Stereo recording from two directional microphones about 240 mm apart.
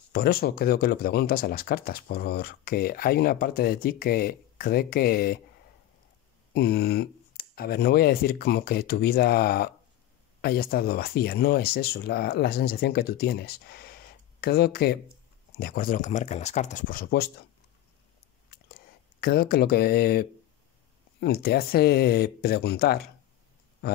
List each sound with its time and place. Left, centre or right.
0.1 s speech: left
6.5 s speech: left
19.2 s speech: left